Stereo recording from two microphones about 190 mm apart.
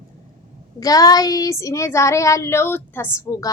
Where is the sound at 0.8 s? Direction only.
20° left (ahead or behind).